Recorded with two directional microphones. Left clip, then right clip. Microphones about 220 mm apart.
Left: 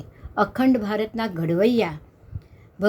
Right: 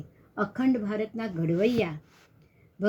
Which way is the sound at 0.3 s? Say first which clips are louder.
Left 7 dB; 10° left (ahead or behind).